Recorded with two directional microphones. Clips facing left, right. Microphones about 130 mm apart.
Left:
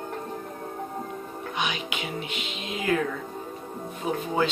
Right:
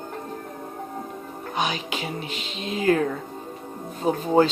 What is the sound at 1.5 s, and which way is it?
Music, 35° right (ahead or behind).